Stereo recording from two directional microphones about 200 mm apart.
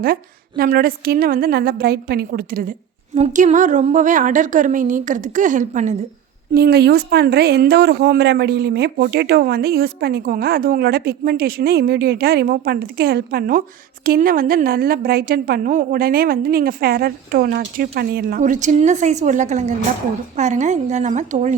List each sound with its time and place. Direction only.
0.0 s a woman's voice: 45° right (ahead or behind)
6.5 s a woman's voice: 50° right (ahead or behind)